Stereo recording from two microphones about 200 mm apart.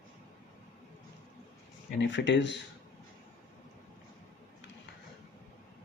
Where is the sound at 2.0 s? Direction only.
65° left (ahead or behind).